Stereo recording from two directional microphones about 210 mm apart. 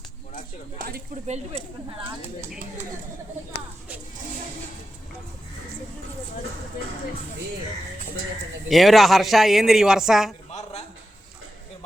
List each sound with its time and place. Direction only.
0.9 s speech: 45° right (ahead or behind)
8.7 s a man's voice: centre (ahead or behind)
10.5 s a sound: 30° left (ahead or behind)